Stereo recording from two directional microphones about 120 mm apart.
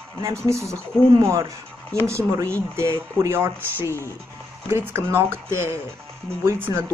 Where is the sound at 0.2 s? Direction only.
25° right (ahead or behind).